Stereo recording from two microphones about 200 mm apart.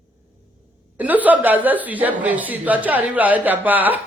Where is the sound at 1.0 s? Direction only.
10° right (ahead or behind).